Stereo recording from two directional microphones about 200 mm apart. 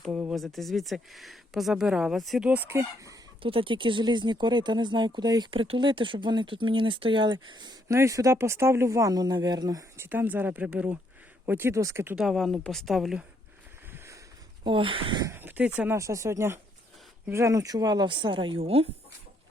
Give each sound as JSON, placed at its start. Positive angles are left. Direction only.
{"t": 0.0, "sound": "speech", "side_deg": -5}
{"t": 2.6, "sound": "speech", "side_deg": -15}
{"t": 13.9, "sound": "a sound", "side_deg": -15}
{"t": 14.6, "sound": "speech", "side_deg": -25}